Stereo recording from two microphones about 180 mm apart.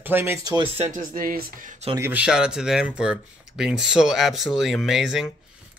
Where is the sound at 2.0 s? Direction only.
5° right (ahead or behind).